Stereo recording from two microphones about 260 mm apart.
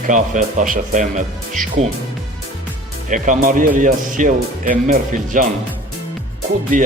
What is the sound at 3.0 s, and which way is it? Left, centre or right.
Speech, right.